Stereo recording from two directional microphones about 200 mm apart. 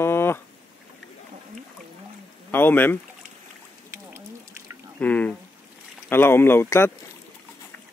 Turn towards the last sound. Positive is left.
turn(degrees=10)  # may be behind; listen again after turning